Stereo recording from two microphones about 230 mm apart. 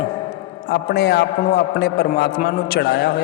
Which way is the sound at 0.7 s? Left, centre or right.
Left.